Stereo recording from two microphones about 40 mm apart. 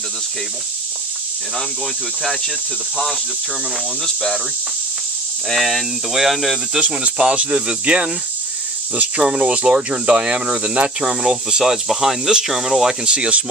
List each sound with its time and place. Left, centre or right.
4.0 s speech: centre
5.5 s speech: centre
6.8 s speech: right
7.6 s cricket: right
9.1 s cricket: right
11.1 s speech: centre
13.0 s cricket: right